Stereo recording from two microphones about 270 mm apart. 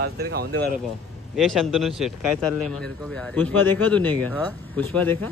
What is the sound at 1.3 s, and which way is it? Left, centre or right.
Speech, centre.